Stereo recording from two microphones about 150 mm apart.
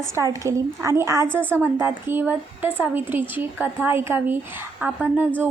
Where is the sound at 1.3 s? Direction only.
10° left (ahead or behind).